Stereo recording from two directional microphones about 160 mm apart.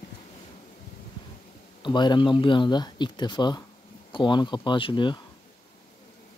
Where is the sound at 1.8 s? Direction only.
30° left (ahead or behind).